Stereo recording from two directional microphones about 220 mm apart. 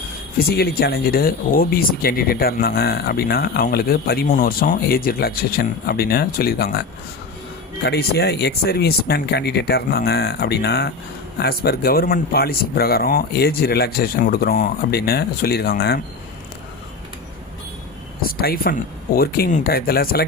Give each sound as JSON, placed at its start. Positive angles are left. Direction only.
{"t": 0.3, "sound": "speech", "side_deg": 45}
{"t": 7.9, "sound": "speech", "side_deg": 45}
{"t": 18.2, "sound": "speech", "side_deg": 45}